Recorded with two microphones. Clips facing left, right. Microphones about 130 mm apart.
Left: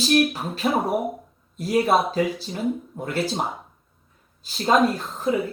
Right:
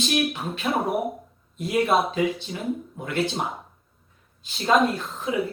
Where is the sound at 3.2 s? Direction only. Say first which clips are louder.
Even; centre (ahead or behind).